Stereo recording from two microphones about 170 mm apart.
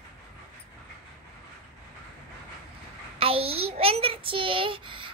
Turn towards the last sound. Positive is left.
turn(degrees=-30)  # may be behind; listen again after turning